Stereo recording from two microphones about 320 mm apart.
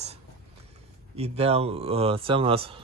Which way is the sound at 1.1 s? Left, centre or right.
Centre.